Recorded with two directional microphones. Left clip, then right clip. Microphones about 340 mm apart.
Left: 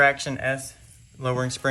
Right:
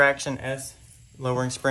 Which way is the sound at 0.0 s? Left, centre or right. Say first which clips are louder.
Left 1 dB; centre.